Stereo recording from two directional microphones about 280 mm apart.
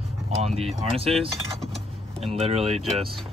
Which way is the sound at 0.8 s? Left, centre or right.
Centre.